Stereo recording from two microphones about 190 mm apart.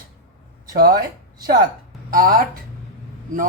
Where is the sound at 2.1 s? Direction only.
50° right (ahead or behind).